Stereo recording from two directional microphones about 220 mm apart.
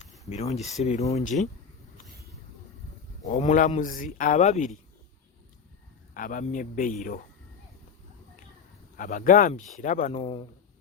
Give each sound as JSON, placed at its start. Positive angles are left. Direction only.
{"t": 0.5, "sound": "speech", "side_deg": 30}
{"t": 3.2, "sound": "speech", "side_deg": 35}
{"t": 6.1, "sound": "speech", "side_deg": 35}
{"t": 9.0, "sound": "speech", "side_deg": 35}